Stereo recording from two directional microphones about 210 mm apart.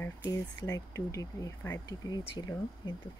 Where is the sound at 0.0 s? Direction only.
20° left (ahead or behind).